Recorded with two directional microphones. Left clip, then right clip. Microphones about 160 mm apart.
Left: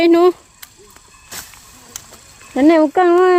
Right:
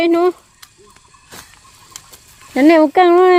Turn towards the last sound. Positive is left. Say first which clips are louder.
# right 2 dB
turn(degrees=-20)  # may be behind; listen again after turning